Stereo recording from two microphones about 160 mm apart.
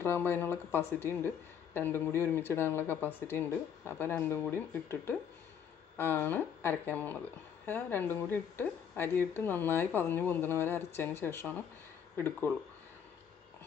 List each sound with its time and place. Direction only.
0.0 s speech: 15° left (ahead or behind)